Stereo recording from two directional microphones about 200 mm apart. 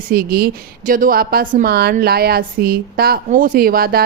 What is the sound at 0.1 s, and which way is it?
Speech, 50° right (ahead or behind).